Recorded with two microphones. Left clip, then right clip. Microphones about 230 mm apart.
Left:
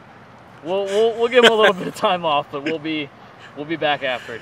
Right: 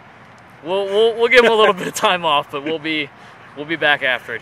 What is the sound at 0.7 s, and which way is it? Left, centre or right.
Speech, centre.